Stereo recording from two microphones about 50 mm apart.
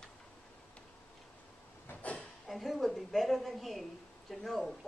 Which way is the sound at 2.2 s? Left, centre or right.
Centre.